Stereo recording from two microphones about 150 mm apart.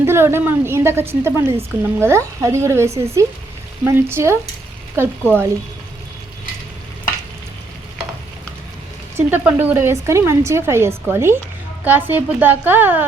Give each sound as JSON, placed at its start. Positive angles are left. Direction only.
{"t": 0.0, "sound": "a woman's voice", "side_deg": -15}
{"t": 9.1, "sound": "a woman's voice", "side_deg": -15}